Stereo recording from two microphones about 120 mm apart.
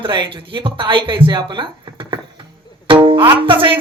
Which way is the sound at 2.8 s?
45° right (ahead or behind).